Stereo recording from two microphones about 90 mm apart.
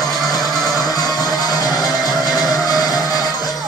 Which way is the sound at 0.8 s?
45° left (ahead or behind).